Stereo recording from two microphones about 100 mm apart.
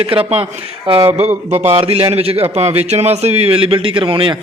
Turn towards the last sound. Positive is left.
turn(degrees=-60)  # may be behind; listen again after turning